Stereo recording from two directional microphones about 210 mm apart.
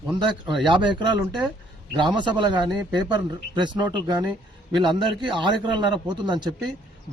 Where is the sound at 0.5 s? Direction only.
20° right (ahead or behind).